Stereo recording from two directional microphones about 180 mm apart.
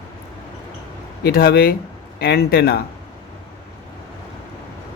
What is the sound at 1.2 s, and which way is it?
Speech, 60° left (ahead or behind).